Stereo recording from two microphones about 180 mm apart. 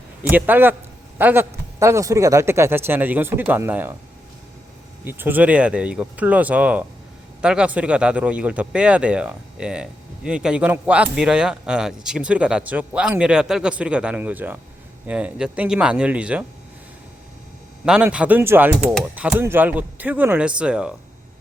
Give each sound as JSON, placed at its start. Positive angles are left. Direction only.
{"t": 0.2, "sound": "speech", "side_deg": -10}
{"t": 5.0, "sound": "speech", "side_deg": -10}
{"t": 17.8, "sound": "speech", "side_deg": -5}